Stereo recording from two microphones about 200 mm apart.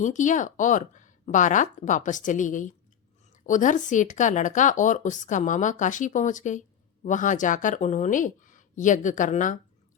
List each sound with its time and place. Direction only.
0.0 s a woman's voice: 40° left (ahead or behind)